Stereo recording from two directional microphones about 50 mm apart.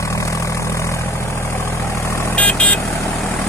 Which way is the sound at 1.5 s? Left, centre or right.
Left.